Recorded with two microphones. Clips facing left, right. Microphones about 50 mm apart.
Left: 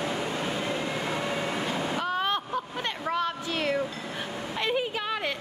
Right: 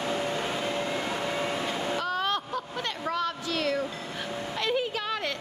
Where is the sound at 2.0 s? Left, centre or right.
Centre.